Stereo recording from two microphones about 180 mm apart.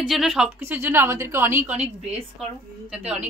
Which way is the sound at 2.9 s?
5° right (ahead or behind).